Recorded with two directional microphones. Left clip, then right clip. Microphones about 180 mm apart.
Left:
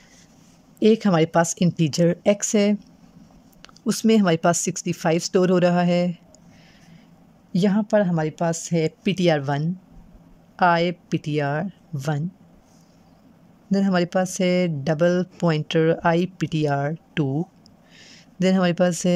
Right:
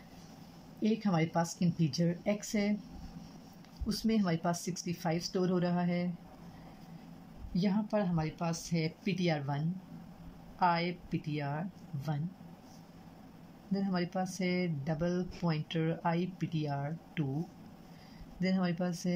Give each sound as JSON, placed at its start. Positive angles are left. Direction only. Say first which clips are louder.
{"t": 0.8, "sound": "speech", "louder": "left 15 dB", "side_deg": 65}
{"t": 7.6, "sound": "speech", "louder": "left 14 dB", "side_deg": 80}
{"t": 10.6, "sound": "speech", "louder": "left 12 dB", "side_deg": 80}
{"t": 13.7, "sound": "speech", "louder": "left 14 dB", "side_deg": 75}
{"t": 18.4, "sound": "speech", "louder": "left 16 dB", "side_deg": 75}